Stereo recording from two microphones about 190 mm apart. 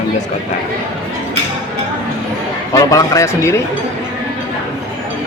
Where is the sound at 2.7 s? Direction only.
15° left (ahead or behind).